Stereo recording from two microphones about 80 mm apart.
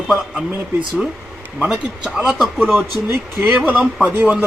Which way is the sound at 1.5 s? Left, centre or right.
Centre.